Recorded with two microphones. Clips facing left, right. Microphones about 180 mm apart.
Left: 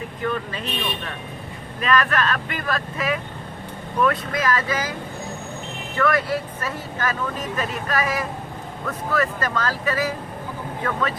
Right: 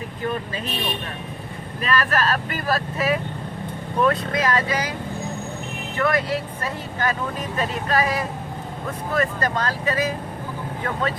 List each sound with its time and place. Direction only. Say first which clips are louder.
0.3 s speech: even; 35° right (ahead or behind)
1.8 s speech: left 1 dB; 35° right (ahead or behind)
4.0 s speech: right 1 dB; 25° right (ahead or behind)
6.0 s speech: left 1 dB; 25° right (ahead or behind)
9.8 s speech: right 2 dB; 20° right (ahead or behind)